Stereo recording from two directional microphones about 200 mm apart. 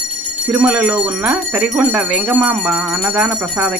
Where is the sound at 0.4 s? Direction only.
5° right (ahead or behind).